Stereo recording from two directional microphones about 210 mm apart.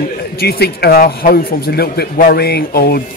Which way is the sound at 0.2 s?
50° left (ahead or behind).